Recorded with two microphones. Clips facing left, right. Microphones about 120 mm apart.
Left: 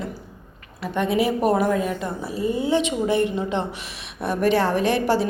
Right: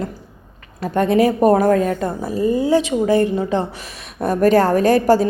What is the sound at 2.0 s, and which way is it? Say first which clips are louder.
A woman's voice: right 6 dB; 45° right (ahead or behind).